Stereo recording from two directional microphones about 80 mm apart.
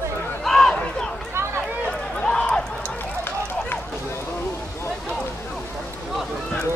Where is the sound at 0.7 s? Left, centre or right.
Centre.